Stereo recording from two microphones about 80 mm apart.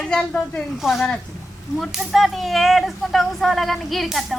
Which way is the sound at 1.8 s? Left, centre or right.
Centre.